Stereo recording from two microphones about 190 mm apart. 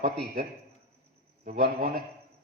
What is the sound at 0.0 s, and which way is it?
Speech, 55° right (ahead or behind).